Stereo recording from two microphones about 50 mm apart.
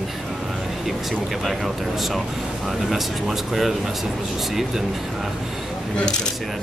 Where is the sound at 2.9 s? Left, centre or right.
Centre.